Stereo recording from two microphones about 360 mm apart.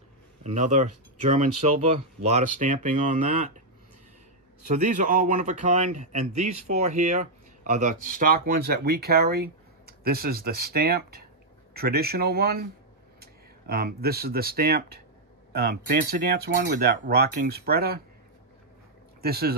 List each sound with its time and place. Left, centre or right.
0.4 s speech: centre
4.6 s speech: right
19.2 s speech: right